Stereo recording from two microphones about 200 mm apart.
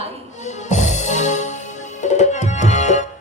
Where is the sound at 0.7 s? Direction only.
35° left (ahead or behind).